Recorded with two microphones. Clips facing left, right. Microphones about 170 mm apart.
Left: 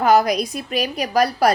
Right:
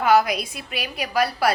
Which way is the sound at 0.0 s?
40° left (ahead or behind).